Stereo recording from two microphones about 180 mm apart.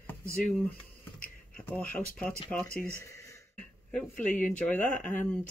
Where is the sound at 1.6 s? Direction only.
10° left (ahead or behind).